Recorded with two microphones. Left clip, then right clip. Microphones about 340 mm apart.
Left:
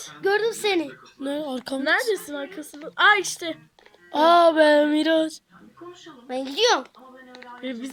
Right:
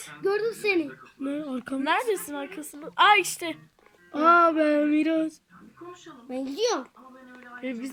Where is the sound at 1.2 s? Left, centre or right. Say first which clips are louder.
Left 4 dB; centre.